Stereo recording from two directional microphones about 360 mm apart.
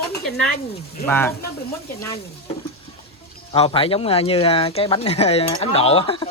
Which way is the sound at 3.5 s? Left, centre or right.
Centre.